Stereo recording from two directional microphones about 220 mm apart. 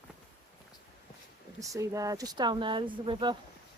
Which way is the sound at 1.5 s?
15° right (ahead or behind).